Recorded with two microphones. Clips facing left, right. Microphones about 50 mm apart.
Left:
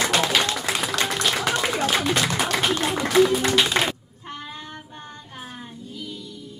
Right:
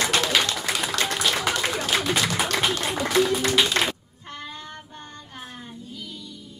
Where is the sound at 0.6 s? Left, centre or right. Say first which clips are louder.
Left 1 dB; centre.